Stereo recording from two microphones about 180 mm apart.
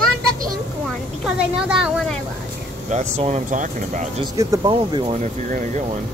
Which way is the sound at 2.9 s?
40° right (ahead or behind).